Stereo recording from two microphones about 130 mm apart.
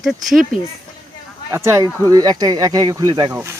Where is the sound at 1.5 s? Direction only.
20° right (ahead or behind).